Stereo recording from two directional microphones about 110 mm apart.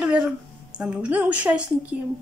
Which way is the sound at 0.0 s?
10° right (ahead or behind).